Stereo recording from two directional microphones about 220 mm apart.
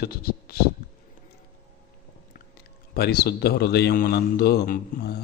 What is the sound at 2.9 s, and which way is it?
A man's voice, 45° left (ahead or behind).